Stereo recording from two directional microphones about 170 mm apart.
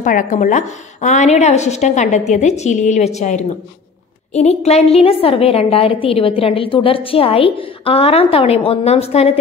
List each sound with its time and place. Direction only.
0.0 s a woman's voice: 50° left (ahead or behind)